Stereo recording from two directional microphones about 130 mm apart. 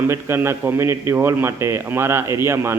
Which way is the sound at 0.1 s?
20° right (ahead or behind).